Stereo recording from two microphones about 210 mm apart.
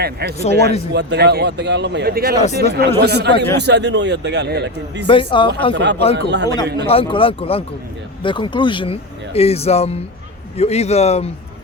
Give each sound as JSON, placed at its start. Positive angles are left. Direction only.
{"t": 0.0, "sound": "a man's voice", "side_deg": -50}
{"t": 0.3, "sound": "a man's voice", "side_deg": 30}
{"t": 0.9, "sound": "a man's voice", "side_deg": -50}
{"t": 5.0, "sound": "speech", "side_deg": 25}
{"t": 5.7, "sound": "a man's voice", "side_deg": -55}
{"t": 6.8, "sound": "a man's voice", "side_deg": 25}